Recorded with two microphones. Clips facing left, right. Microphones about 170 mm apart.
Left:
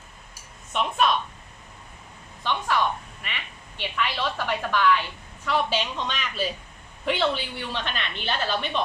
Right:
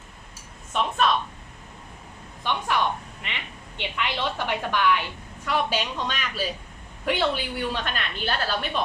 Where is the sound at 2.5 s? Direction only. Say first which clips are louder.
Even; 15° right (ahead or behind).